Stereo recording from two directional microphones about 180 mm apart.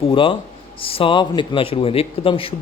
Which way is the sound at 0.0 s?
30° left (ahead or behind).